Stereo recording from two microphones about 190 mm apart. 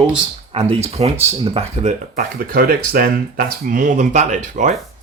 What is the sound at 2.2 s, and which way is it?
Speech, 50° right (ahead or behind).